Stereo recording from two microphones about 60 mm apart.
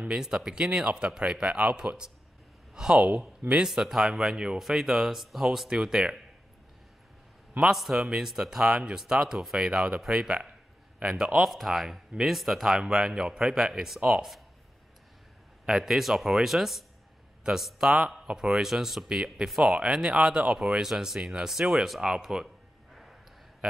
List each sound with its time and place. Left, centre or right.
0.1 s speech: centre
7.6 s a man's voice: centre
15.6 s a man's voice: centre
23.6 s a sound: centre